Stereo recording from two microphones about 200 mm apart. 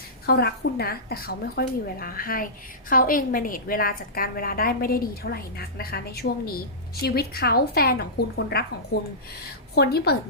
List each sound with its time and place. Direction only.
0.3 s a woman's voice: 55° left (ahead or behind)